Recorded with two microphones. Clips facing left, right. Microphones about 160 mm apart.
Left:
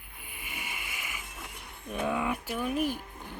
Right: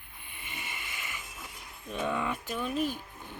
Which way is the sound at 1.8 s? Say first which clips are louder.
Left 2 dB; 10° left (ahead or behind).